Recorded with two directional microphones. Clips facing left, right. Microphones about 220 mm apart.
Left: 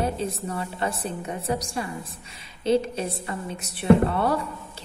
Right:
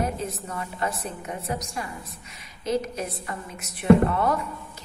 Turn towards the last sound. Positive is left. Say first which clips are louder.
# even
turn(degrees=30)  # may be behind; listen again after turning